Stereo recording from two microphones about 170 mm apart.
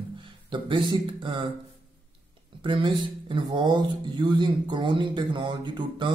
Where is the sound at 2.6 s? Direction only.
30° right (ahead or behind).